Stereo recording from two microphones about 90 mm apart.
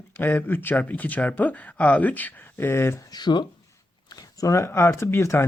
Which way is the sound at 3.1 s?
55° left (ahead or behind).